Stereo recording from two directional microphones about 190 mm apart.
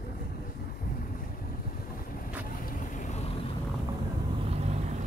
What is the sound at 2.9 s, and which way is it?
Vehicle, 40° left (ahead or behind).